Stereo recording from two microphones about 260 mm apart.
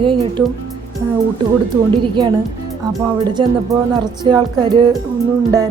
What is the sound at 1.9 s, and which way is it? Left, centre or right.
Speech, centre.